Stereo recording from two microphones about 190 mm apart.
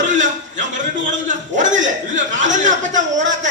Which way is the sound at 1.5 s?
40° right (ahead or behind).